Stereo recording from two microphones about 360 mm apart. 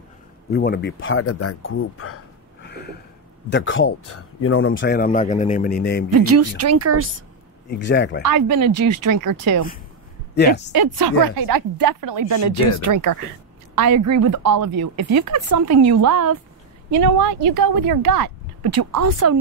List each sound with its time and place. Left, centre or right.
0.5 s speech: left
2.6 s a sound: left
3.4 s speech: left
6.1 s speech: right
7.8 s speech: left
8.2 s speech: right
8.7 s a woman's voice: right
9.1 s speech: right
10.3 s speech: left
10.7 s speech: right
13.7 s a woman's voice: right
15.7 s speech: right
16.1 s speech: right
17.0 s speech: right